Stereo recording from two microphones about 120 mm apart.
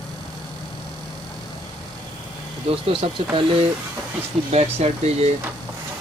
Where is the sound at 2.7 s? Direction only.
45° right (ahead or behind).